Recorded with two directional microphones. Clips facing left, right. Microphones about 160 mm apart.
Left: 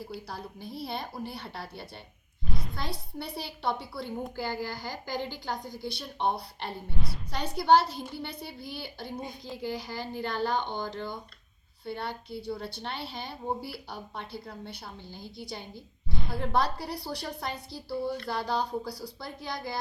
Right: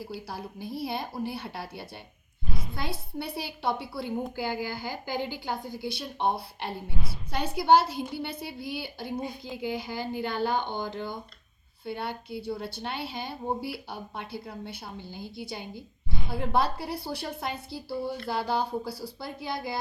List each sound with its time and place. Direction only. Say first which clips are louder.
0.0 s a woman's voice: right 2 dB; 5° right (ahead or behind)